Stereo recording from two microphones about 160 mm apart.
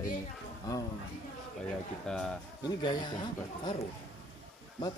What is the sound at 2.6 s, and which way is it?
Speech, 25° left (ahead or behind).